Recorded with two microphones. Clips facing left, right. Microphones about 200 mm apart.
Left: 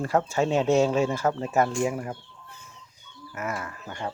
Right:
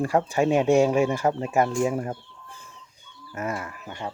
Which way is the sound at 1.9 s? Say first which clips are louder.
Right 4 dB; 35° right (ahead or behind).